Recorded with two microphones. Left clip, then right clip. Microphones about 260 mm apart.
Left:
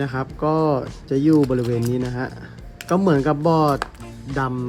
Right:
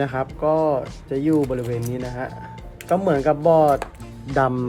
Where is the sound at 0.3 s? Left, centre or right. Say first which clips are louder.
Even; centre.